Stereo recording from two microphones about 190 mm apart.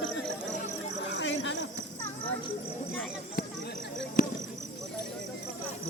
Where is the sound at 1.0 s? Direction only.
75° left (ahead or behind).